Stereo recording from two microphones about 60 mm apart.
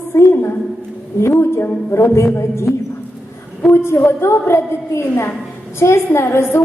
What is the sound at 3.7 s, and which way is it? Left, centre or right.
A woman's voice, left.